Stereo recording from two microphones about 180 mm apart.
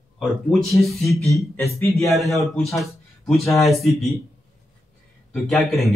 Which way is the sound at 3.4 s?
15° left (ahead or behind).